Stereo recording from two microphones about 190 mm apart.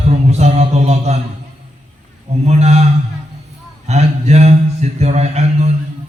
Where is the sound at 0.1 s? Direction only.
35° right (ahead or behind).